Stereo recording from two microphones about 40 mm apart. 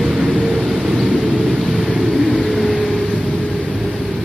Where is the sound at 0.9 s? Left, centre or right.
Right.